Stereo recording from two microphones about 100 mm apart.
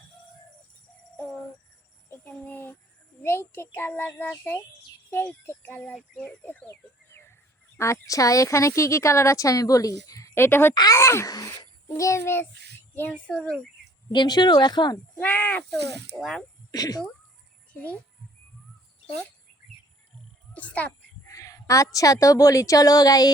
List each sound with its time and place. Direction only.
1.1 s music: 15° left (ahead or behind)
2.0 s a sound: 15° left (ahead or behind)
3.2 s a child's voice: 20° left (ahead or behind)
10.8 s speech: 40° left (ahead or behind)
11.0 s a child's voice: 30° left (ahead or behind)
13.0 s speech: 15° left (ahead or behind)
14.1 s speech: 45° left (ahead or behind)
15.1 s speech: 20° left (ahead or behind)
16.1 s speech: 5° left (ahead or behind)
16.7 s speech: 40° left (ahead or behind)
20.5 s a sound: 15° left (ahead or behind)
21.2 s a woman's voice: 35° left (ahead or behind)